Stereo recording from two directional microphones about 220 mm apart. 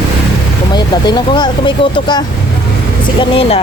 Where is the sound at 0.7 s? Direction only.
20° left (ahead or behind).